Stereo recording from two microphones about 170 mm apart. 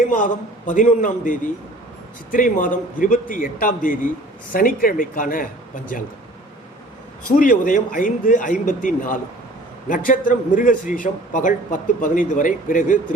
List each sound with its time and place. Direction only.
0.1 s a man's voice: 50° left (ahead or behind)
7.3 s a man's voice: 50° left (ahead or behind)